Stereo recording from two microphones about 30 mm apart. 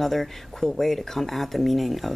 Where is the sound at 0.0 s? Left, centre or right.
Centre.